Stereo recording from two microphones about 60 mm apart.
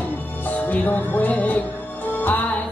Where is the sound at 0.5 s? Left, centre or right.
Left.